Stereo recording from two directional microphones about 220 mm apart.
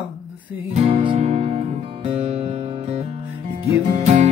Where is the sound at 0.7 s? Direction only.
30° right (ahead or behind).